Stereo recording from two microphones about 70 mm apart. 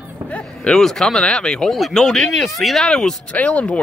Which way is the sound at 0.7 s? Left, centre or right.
Centre.